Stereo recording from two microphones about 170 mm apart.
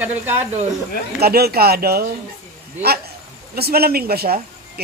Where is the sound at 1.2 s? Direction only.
65° right (ahead or behind).